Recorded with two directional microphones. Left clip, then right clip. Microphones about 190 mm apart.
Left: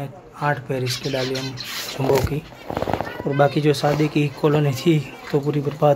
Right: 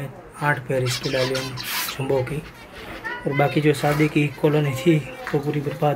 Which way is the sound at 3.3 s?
20° left (ahead or behind).